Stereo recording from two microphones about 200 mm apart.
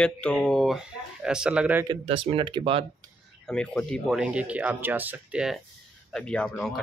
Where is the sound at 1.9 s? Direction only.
25° right (ahead or behind).